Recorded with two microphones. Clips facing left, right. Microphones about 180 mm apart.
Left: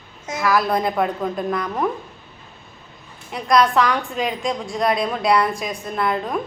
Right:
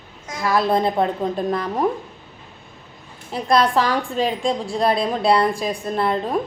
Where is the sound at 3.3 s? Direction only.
30° right (ahead or behind).